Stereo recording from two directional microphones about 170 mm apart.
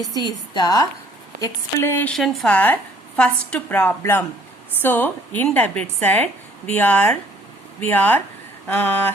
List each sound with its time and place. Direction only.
0.1 s a woman's voice: 25° left (ahead or behind)
1.4 s a woman's voice: 15° left (ahead or behind)
2.1 s a woman's voice: centre (ahead or behind)